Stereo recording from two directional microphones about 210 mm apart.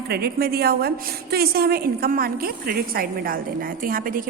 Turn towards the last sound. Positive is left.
turn(degrees=-40)  # may be behind; listen again after turning